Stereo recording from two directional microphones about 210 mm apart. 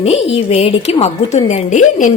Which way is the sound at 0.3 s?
30° left (ahead or behind).